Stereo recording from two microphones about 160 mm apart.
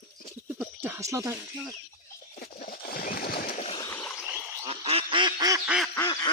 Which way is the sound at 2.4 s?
70° left (ahead or behind).